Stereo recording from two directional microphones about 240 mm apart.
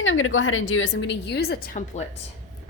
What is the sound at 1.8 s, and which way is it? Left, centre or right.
Speech, left.